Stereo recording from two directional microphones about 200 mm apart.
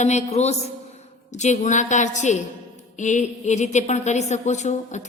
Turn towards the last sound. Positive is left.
turn(degrees=35)  # may be behind; listen again after turning